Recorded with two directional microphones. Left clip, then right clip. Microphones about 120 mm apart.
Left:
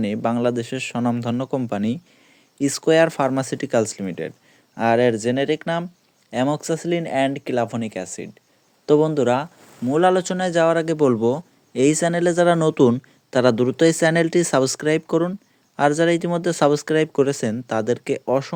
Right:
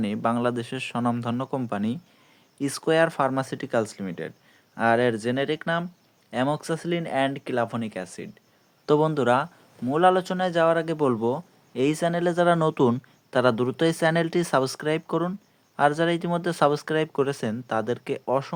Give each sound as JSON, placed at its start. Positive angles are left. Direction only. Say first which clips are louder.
{"t": 0.0, "sound": "a man's voice", "louder": "left 4 dB", "side_deg": 25}
{"t": 4.7, "sound": "speech", "louder": "left 4 dB", "side_deg": 30}
{"t": 8.9, "sound": "speech", "louder": "left 4 dB", "side_deg": 10}
{"t": 9.9, "sound": "speech", "louder": "left 3 dB", "side_deg": 45}
{"t": 12.5, "sound": "speech", "louder": "left 5 dB", "side_deg": 30}